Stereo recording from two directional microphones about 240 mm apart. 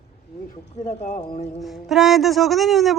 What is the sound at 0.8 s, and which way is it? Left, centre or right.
Speech, left.